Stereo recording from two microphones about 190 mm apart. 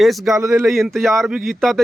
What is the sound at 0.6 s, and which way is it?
Speech, centre (ahead or behind).